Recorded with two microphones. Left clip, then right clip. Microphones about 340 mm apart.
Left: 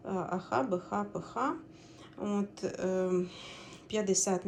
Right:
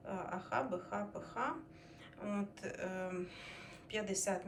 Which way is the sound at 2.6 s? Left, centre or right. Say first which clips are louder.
Left 10 dB; centre.